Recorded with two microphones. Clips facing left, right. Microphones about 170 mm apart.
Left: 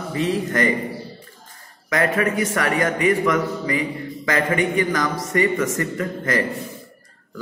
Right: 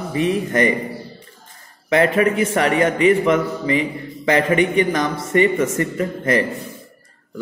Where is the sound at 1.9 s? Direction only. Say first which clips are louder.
Right 4 dB; 25° right (ahead or behind).